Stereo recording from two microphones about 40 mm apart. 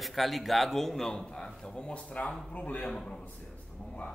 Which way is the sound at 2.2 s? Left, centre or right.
Left.